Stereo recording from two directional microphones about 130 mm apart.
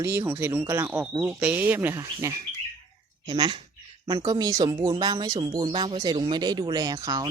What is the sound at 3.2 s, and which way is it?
Speech, 35° right (ahead or behind).